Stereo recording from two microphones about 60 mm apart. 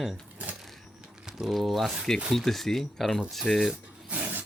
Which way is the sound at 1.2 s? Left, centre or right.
Centre.